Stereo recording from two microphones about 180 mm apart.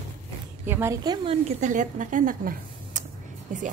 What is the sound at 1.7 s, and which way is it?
A woman's voice, 45° right (ahead or behind).